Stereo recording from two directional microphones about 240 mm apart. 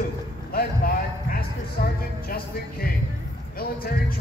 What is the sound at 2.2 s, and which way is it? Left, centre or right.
Music, left.